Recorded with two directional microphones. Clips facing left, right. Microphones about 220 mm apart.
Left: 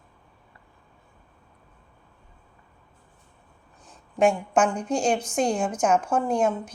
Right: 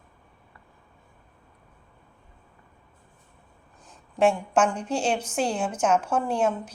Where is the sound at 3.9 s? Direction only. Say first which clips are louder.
Left 1 dB; centre (ahead or behind).